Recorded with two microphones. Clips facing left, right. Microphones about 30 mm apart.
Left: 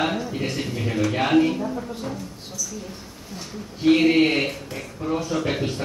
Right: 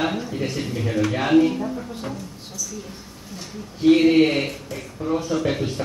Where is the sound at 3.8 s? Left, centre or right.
Centre.